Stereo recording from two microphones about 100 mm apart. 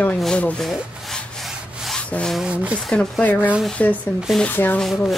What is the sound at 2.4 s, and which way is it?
Speech, 15° right (ahead or behind).